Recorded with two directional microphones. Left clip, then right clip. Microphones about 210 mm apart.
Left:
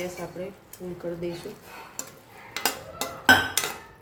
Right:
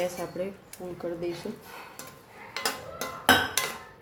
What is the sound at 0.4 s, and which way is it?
Speech, 35° right (ahead or behind).